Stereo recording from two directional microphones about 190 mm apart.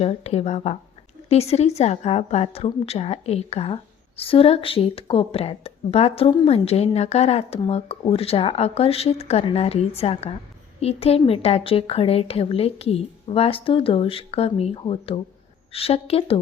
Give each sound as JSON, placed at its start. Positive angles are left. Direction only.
{"t": 0.0, "sound": "speech", "side_deg": 35}